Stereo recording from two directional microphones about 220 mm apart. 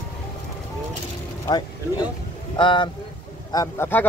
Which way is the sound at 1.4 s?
20° left (ahead or behind).